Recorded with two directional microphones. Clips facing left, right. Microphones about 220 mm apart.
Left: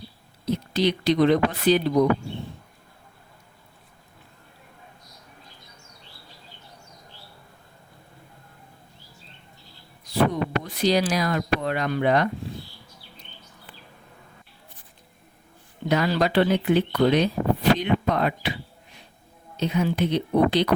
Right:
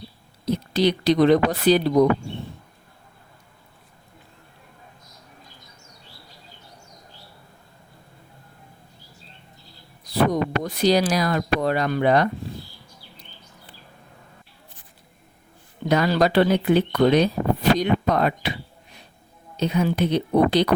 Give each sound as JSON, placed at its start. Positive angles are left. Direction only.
{"t": 0.4, "sound": "speech", "side_deg": -40}
{"t": 10.0, "sound": "speech", "side_deg": -35}
{"t": 15.9, "sound": "speech", "side_deg": -40}
{"t": 19.5, "sound": "speech", "side_deg": -40}